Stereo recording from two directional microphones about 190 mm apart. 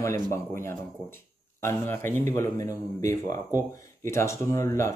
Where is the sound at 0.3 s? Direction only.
15° left (ahead or behind).